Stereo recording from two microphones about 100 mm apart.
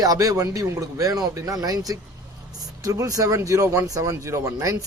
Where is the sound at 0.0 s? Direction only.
40° right (ahead or behind).